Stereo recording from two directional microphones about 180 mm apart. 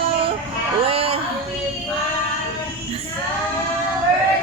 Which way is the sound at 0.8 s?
30° right (ahead or behind).